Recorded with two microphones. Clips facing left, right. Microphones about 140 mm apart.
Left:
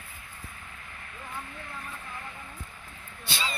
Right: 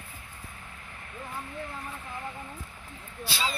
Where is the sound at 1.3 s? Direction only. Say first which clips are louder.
Right 3 dB; 20° right (ahead or behind).